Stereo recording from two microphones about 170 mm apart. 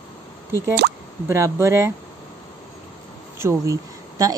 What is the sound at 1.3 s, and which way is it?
Speech, 15° right (ahead or behind).